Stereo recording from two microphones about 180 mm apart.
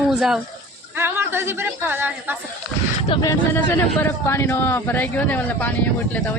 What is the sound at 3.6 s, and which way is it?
A man's voice, 10° left (ahead or behind).